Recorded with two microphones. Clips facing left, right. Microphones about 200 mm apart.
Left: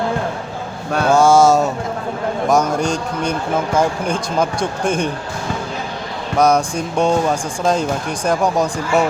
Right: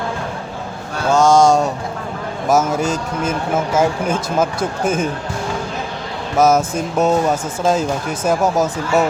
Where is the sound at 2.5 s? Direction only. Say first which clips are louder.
Right 1 dB; 5° right (ahead or behind).